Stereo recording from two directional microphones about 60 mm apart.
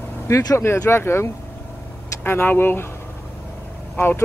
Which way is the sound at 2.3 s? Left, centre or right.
Left.